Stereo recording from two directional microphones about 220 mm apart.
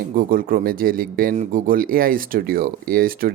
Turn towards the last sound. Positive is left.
turn(degrees=-40)  # may be behind; listen again after turning